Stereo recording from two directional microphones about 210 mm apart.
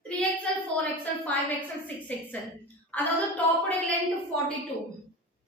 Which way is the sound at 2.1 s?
5° left (ahead or behind).